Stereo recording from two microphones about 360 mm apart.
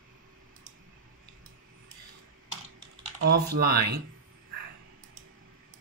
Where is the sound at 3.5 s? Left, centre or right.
Right.